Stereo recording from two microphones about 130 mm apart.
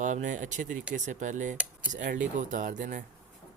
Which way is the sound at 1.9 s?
80° right.